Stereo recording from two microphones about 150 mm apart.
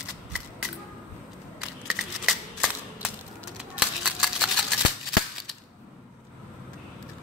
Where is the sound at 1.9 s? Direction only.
Centre (ahead or behind).